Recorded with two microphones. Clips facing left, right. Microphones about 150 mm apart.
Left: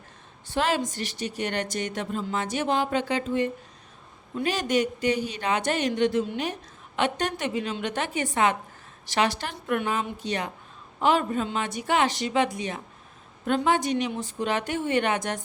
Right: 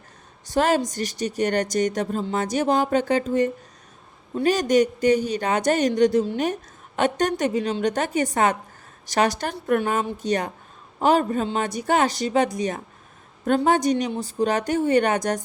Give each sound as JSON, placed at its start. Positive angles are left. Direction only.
{"t": 0.5, "sound": "a woman's voice", "side_deg": -40}